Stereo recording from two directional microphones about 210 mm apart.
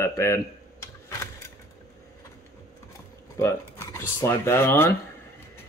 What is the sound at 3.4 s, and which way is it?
Speech, 15° left (ahead or behind).